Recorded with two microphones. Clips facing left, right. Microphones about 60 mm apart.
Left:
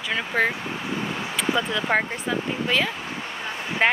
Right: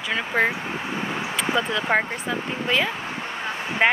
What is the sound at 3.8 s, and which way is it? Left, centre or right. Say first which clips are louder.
Speech: right 1 dB; centre.